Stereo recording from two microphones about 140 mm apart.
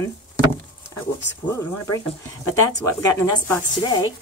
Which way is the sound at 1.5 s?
20° left (ahead or behind).